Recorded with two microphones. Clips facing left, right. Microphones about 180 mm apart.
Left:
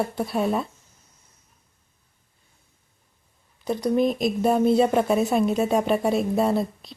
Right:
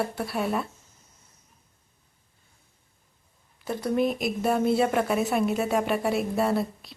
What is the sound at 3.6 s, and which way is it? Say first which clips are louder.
Speech: left 4 dB; 20° left (ahead or behind).